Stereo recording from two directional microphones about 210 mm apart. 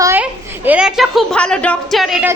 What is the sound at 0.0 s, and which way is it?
A woman's voice, 10° right (ahead or behind).